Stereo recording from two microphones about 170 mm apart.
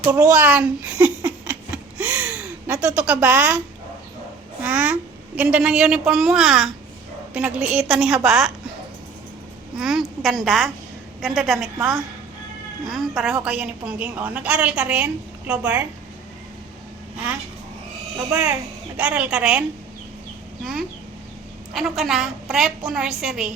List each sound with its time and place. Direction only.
0.1 s a sound: 10° right (ahead or behind)
2.8 s a woman's voice: 5° right (ahead or behind)
4.6 s a woman's voice: 10° right (ahead or behind)
9.7 s a woman's voice: 5° right (ahead or behind)
18.3 s speech: 20° right (ahead or behind)
18.9 s a woman's voice: 5° right (ahead or behind)
21.7 s a woman's voice: centre (ahead or behind)